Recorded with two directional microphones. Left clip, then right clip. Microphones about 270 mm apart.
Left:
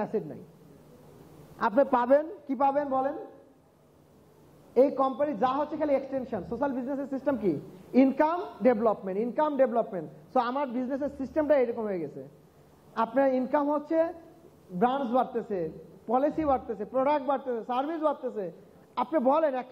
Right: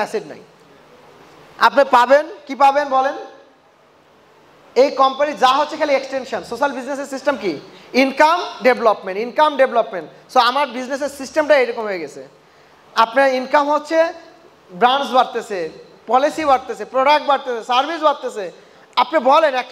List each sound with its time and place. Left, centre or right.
0.0 s a woman's voice: centre
1.6 s a man's voice: centre
4.7 s a man's voice: centre